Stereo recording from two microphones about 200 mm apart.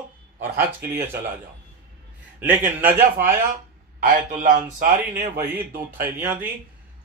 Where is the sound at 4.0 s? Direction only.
40° right (ahead or behind).